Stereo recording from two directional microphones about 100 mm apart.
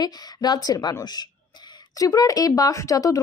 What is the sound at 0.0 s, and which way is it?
A woman's voice, 45° left (ahead or behind).